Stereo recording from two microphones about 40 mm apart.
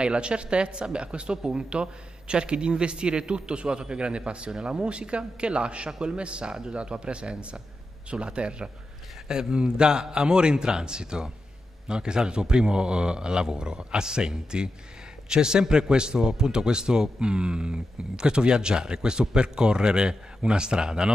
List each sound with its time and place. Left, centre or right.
0.0 s speech: right